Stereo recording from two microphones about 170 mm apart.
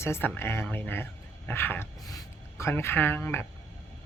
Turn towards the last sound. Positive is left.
turn(degrees=10)  # may be behind; listen again after turning